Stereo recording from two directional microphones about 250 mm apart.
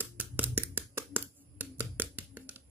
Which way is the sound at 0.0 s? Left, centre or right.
Centre.